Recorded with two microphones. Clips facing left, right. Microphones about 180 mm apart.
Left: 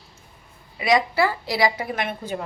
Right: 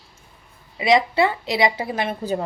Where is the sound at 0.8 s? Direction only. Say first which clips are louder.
Right 2 dB; 25° right (ahead or behind).